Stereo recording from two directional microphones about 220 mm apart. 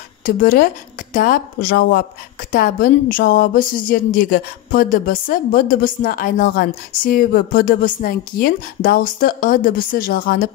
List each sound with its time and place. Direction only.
0.2 s speech: 40° left (ahead or behind)